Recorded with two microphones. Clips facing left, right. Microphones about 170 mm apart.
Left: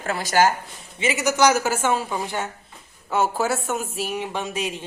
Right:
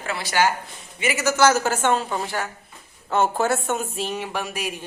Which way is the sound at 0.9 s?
25° left (ahead or behind).